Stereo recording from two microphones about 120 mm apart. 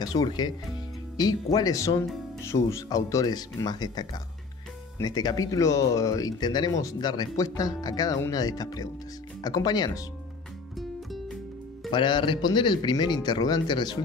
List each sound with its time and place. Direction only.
0.0 s speech: 35° left (ahead or behind)
11.9 s speech: 40° left (ahead or behind)